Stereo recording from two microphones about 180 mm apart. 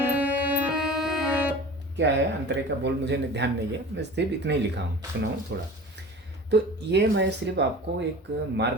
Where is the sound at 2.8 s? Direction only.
75° right (ahead or behind).